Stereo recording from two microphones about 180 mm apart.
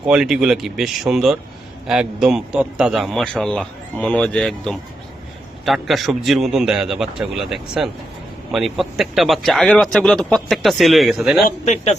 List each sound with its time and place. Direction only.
0.0 s a man's voice: 5° right (ahead or behind)
11.4 s speech: 40° left (ahead or behind)